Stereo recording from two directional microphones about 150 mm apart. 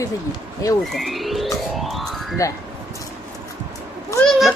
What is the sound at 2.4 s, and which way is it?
Speech, 20° left (ahead or behind).